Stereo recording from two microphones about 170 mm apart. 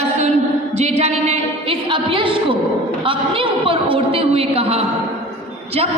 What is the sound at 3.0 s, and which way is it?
A woman's voice, 30° right (ahead or behind).